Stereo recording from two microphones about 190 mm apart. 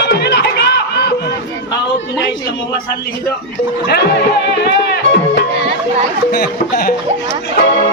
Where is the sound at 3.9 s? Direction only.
60° left (ahead or behind).